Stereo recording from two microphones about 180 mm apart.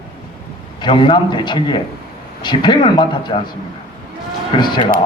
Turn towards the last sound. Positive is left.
turn(degrees=25)  # may be behind; listen again after turning